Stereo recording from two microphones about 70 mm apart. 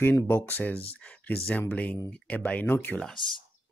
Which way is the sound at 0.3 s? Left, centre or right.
Left.